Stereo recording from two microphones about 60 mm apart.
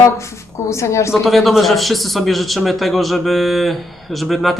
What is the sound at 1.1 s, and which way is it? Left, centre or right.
Speech, centre.